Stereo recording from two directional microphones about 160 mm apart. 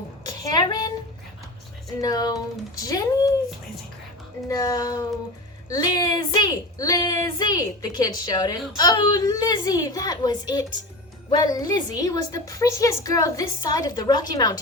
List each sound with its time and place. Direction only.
0.5 s a sound: 25° left (ahead or behind)
2.0 s speech: 25° left (ahead or behind)
4.4 s speech: 20° left (ahead or behind)